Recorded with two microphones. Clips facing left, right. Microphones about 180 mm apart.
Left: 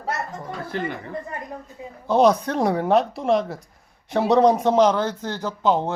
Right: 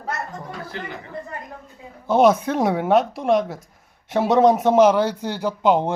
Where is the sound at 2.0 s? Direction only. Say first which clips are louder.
Right 1 dB; 5° right (ahead or behind).